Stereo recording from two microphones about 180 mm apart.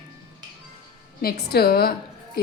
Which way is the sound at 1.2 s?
60° left (ahead or behind).